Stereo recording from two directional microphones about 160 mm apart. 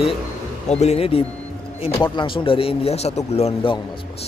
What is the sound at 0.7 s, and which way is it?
Speech, 40° left (ahead or behind).